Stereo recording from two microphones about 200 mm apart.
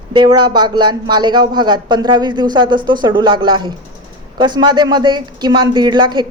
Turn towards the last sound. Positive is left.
turn(degrees=-20)  # may be behind; listen again after turning